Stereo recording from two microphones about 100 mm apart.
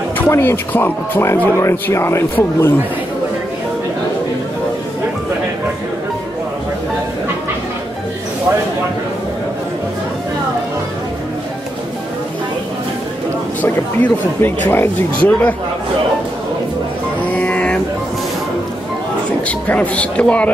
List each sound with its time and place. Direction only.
0.3 s speech: 25° left (ahead or behind)
13.6 s speech: 20° left (ahead or behind)
17.3 s music: 15° left (ahead or behind)
19.7 s speech: 15° left (ahead or behind)